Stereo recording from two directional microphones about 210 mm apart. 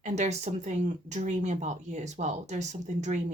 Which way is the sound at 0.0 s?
30° right (ahead or behind).